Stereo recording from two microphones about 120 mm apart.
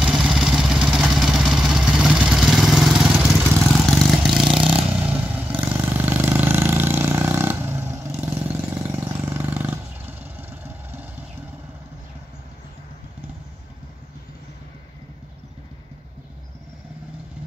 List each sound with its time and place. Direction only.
0.0 s vehicle: 5° right (ahead or behind)
5.3 s vehicle: 15° right (ahead or behind)